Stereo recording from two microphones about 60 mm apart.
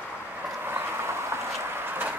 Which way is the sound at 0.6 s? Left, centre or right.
Right.